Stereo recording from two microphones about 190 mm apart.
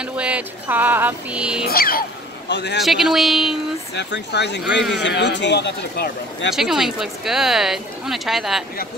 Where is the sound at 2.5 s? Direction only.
65° left (ahead or behind).